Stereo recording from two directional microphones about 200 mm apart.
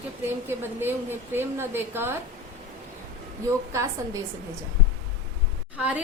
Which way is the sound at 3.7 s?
15° right (ahead or behind).